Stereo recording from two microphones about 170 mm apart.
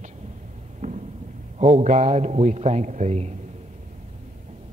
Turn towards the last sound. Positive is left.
turn(degrees=-40)  # may be behind; listen again after turning